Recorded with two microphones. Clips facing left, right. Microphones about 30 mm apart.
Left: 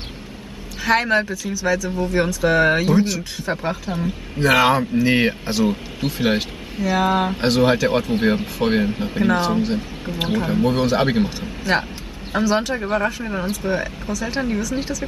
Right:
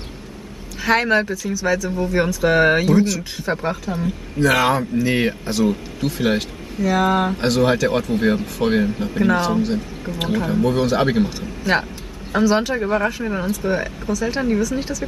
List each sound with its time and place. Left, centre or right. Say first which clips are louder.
0.8 s speech: right 1 dB; centre
2.8 s a man's voice: right 1 dB; centre
3.3 s speech: right 1 dB; centre
4.5 s a man's voice: left 2 dB; centre
12.4 s speech: right 2 dB; centre